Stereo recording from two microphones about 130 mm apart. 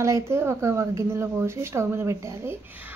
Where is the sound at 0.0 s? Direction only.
20° right (ahead or behind).